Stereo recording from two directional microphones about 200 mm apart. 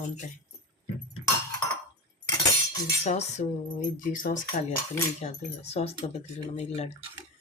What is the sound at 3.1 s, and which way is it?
Speech, 35° left (ahead or behind).